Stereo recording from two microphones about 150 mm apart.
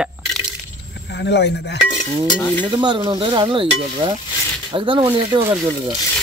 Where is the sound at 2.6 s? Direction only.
30° right (ahead or behind).